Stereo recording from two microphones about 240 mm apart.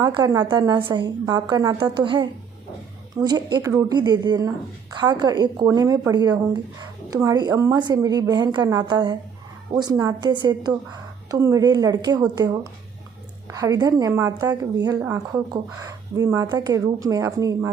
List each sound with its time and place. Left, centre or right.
0.0 s a woman's voice: centre